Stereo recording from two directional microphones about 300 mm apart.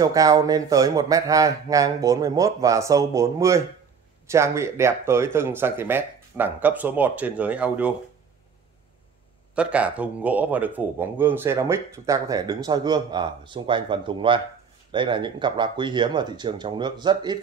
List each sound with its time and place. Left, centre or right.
0.0 s a man's voice: centre
9.6 s a man's voice: centre